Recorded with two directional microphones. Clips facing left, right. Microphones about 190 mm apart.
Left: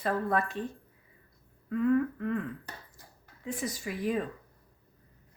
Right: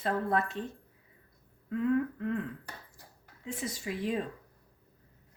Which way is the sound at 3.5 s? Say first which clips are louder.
Left 1 dB; 25° right (ahead or behind).